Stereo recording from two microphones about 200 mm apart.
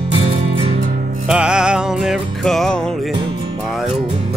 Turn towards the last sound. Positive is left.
turn(degrees=5)  # may be behind; listen again after turning